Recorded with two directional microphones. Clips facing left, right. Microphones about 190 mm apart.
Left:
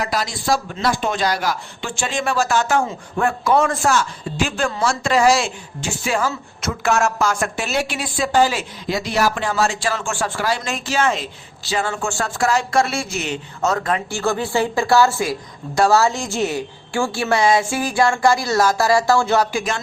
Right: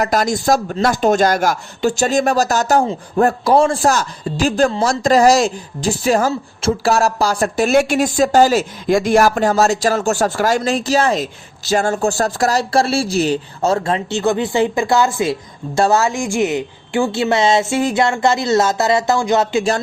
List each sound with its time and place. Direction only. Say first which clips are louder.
0.0 s speech: right 7 dB; 45° right (ahead or behind); by 19.7 s 25° right (ahead or behind)